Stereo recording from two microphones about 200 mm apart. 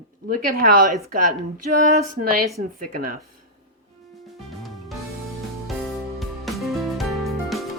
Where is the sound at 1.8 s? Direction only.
45° right (ahead or behind).